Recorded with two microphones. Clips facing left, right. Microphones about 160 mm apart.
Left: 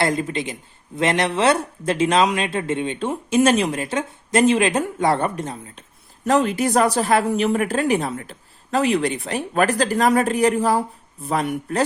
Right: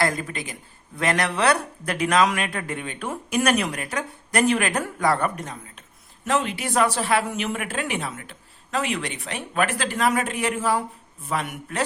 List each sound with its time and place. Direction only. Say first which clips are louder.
0.0 s speech: left 4 dB; 25° left (ahead or behind)
6.2 s speech: left 6 dB; 40° left (ahead or behind)